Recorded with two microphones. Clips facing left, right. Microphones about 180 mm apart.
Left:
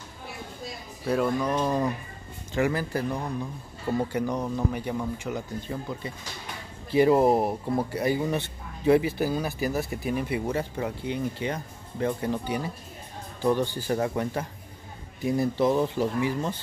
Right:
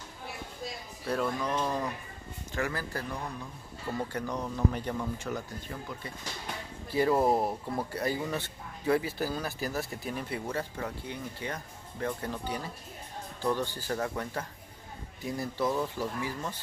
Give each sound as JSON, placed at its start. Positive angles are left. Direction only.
{"t": 1.0, "sound": "speech", "side_deg": 10}